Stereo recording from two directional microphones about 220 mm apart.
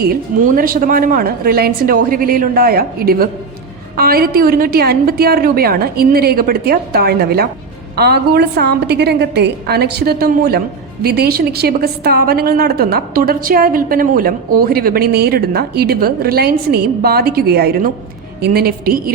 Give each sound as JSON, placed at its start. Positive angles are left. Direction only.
{"t": 0.0, "sound": "a woman's voice", "side_deg": -40}